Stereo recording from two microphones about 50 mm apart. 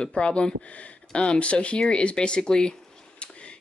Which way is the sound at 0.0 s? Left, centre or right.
Centre.